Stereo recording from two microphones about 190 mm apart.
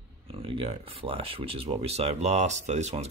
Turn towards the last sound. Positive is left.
turn(degrees=-35)  # may be behind; listen again after turning